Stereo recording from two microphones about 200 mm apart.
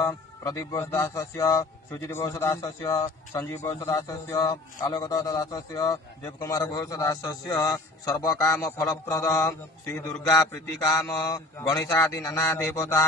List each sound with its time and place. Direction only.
0.0 s speech: 15° left (ahead or behind)